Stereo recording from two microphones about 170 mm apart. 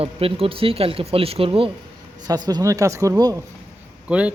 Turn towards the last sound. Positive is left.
turn(degrees=-5)  # may be behind; listen again after turning